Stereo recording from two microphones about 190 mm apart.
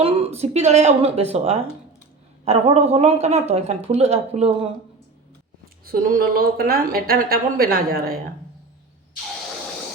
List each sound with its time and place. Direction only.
0.0 s speech: 30° right (ahead or behind)
5.8 s a woman's voice: 50° right (ahead or behind)